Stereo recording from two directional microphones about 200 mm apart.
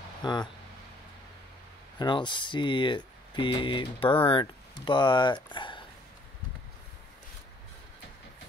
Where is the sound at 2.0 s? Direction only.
25° left (ahead or behind).